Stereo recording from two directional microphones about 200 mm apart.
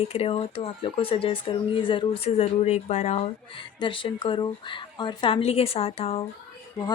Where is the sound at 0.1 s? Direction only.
30° left (ahead or behind).